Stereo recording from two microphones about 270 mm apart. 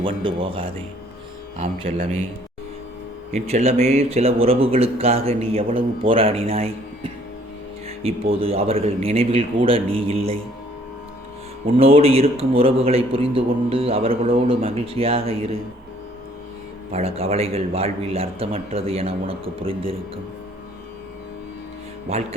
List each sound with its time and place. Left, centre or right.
0.0 s a man's voice: centre
3.3 s a man's voice: right
11.6 s a man's voice: right
16.9 s a man's voice: right
22.1 s a man's voice: right